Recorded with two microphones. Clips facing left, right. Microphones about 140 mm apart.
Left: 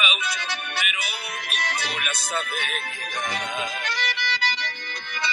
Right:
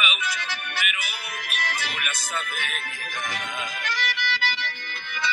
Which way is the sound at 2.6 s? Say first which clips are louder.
Left 2 dB; 20° left (ahead or behind).